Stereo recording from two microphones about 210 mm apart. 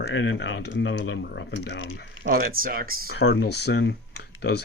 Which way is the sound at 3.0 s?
55° left (ahead or behind).